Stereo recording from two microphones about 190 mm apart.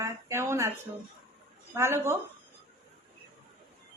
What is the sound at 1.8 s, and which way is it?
Speech, 15° right (ahead or behind).